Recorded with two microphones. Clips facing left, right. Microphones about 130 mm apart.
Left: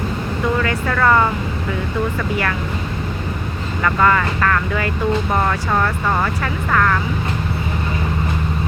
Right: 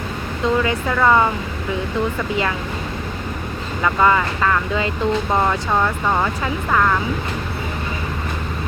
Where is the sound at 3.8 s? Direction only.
15° right (ahead or behind).